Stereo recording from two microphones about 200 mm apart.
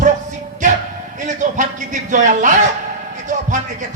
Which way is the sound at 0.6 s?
40° right (ahead or behind).